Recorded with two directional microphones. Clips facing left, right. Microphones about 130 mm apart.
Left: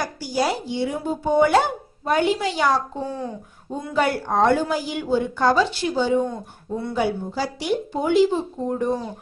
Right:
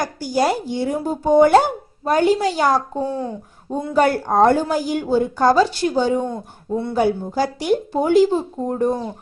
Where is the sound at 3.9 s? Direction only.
45° right (ahead or behind).